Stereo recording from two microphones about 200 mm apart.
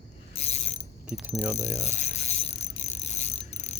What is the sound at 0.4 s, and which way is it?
Mechanisms, 30° left (ahead or behind).